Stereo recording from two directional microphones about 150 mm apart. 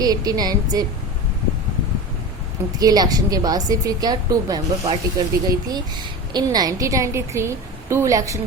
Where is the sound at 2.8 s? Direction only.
25° right (ahead or behind).